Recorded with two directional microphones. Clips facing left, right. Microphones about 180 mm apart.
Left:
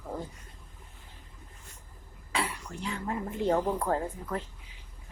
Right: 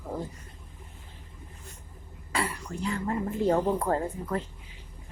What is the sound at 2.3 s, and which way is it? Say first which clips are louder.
Speech: right 2 dB; centre (ahead or behind).